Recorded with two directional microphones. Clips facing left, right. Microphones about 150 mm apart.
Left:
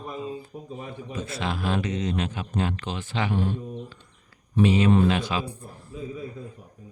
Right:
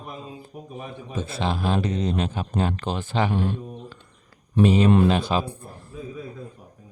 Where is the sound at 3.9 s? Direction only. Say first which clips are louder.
Right 3 dB; 45° right (ahead or behind).